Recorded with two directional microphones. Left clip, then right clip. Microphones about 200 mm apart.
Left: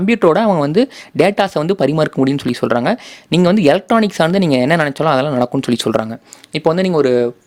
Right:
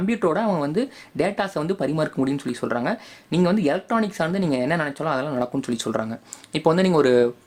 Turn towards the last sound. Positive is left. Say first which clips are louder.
# left 4 dB
turn(degrees=15)  # may be behind; listen again after turning